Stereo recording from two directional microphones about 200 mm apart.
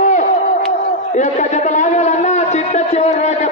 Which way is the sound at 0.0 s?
40° left (ahead or behind).